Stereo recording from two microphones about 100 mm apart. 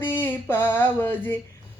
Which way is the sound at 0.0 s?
20° left (ahead or behind).